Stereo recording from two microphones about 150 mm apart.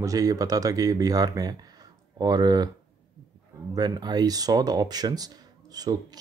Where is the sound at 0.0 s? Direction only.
20° right (ahead or behind).